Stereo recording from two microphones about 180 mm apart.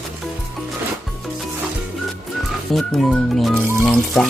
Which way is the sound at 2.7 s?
Centre (ahead or behind).